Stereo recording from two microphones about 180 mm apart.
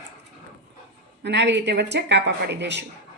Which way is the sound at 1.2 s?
75° right (ahead or behind).